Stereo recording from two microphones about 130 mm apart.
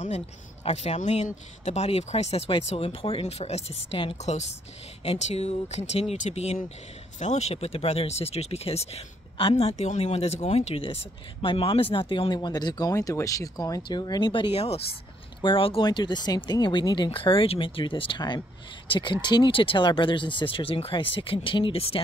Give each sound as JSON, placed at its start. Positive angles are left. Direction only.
{"t": 0.7, "sound": "speech", "side_deg": 55}
{"t": 9.8, "sound": "speech", "side_deg": 60}